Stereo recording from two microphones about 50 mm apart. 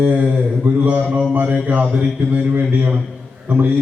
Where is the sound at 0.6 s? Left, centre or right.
Right.